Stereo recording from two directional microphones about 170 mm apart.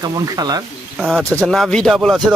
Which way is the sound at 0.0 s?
25° right (ahead or behind).